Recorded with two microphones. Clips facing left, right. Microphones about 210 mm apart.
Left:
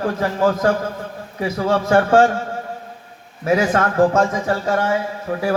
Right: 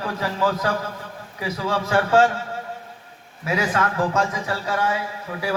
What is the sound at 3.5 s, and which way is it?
A man's voice, 50° left (ahead or behind).